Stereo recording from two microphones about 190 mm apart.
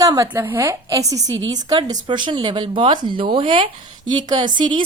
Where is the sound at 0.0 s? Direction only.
15° right (ahead or behind).